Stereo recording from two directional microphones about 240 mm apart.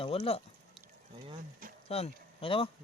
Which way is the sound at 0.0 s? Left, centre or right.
Left.